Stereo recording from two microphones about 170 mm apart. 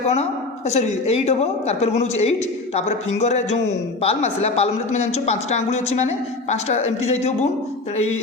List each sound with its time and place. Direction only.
0.1 s a woman's voice: 40° left (ahead or behind)